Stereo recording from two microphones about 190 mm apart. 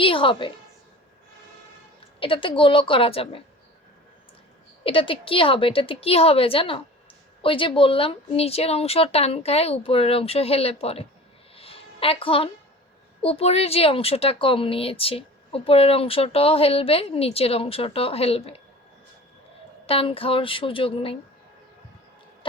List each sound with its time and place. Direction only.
0.0 s a woman's voice: 25° left (ahead or behind)
2.1 s a woman's voice: 25° left (ahead or behind)
4.8 s a woman's voice: 30° left (ahead or behind)
11.5 s a sound: 30° left (ahead or behind)
13.2 s speech: 30° left (ahead or behind)
19.9 s a woman's voice: 30° left (ahead or behind)